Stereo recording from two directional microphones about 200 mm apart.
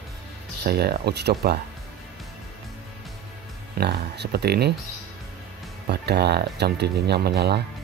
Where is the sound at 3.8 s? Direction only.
55° right (ahead or behind).